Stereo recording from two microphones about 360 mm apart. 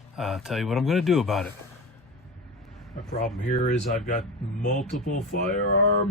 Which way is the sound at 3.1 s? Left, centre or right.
Centre.